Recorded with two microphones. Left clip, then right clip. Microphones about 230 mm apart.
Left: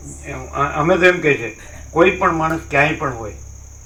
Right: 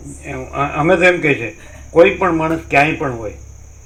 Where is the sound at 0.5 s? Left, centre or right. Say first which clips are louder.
Right 2 dB; right.